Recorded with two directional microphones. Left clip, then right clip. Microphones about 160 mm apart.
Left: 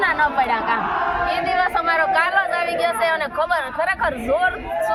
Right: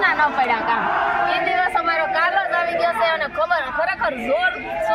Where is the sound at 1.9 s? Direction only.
25° left (ahead or behind).